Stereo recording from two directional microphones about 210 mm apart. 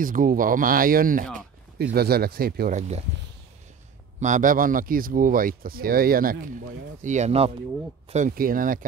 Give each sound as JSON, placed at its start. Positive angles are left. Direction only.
{"t": 0.0, "sound": "speech", "side_deg": -40}
{"t": 4.2, "sound": "speech", "side_deg": -40}
{"t": 8.1, "sound": "speech", "side_deg": -40}